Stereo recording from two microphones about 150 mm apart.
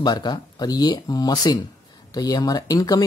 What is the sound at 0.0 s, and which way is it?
Speech, 25° left (ahead or behind).